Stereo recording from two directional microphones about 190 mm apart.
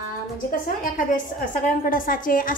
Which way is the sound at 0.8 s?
45° left (ahead or behind).